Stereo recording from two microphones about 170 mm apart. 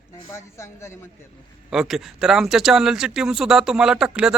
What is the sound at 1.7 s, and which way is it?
Speech, centre (ahead or behind).